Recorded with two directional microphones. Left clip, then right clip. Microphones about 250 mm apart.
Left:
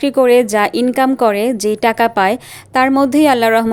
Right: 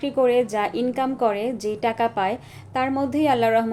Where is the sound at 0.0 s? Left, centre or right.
Left.